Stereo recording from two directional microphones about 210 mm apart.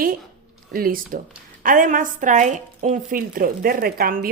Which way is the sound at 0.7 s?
45° right (ahead or behind).